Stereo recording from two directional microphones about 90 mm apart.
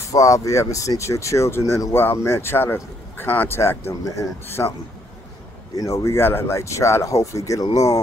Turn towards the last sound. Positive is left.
turn(degrees=40)  # may be behind; listen again after turning